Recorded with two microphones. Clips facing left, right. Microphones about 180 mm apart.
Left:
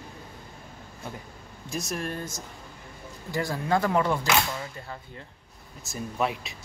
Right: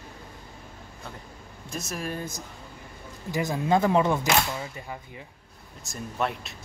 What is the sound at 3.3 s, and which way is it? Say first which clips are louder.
Speech: right 2 dB; 20° right (ahead or behind).